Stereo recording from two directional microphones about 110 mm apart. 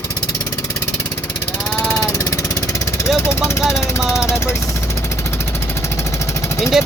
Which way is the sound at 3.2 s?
25° left (ahead or behind).